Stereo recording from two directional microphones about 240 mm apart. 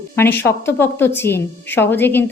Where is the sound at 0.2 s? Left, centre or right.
Centre.